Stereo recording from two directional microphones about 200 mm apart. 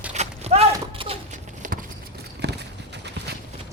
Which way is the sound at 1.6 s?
40° right (ahead or behind).